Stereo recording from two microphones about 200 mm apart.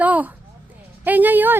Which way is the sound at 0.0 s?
5° right (ahead or behind).